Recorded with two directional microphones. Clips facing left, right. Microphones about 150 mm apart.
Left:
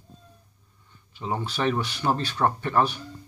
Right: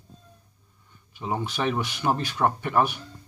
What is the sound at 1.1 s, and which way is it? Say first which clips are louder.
Speech: right 1 dB; 10° right (ahead or behind).